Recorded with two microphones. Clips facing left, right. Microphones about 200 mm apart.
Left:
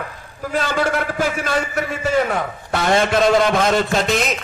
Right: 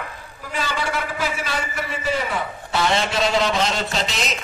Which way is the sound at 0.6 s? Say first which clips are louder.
Left 5 dB; 50° left (ahead or behind).